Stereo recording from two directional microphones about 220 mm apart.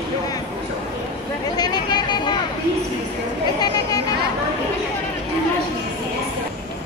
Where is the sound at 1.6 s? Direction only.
20° left (ahead or behind).